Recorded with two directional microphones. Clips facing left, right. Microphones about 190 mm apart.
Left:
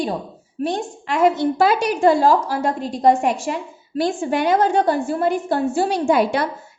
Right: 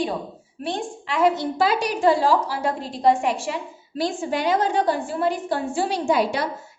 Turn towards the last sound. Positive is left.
turn(degrees=55)  # may be behind; listen again after turning